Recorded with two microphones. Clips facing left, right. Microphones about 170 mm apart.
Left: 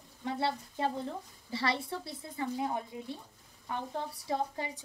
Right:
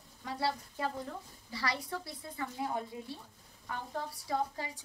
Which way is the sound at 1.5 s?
25° left (ahead or behind).